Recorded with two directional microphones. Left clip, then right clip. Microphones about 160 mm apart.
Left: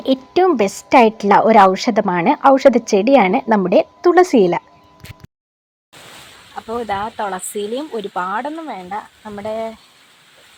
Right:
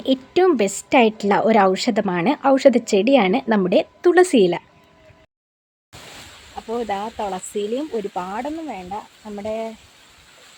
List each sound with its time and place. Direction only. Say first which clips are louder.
0.0 s a woman's voice: left 3 dB; 5° left (ahead or behind)
6.6 s a woman's voice: left 3 dB; centre (ahead or behind)